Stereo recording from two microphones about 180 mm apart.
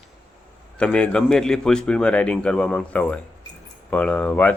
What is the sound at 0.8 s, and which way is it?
Speech, 5° left (ahead or behind).